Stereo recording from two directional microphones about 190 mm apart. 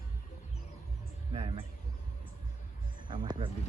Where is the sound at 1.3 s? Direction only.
25° right (ahead or behind).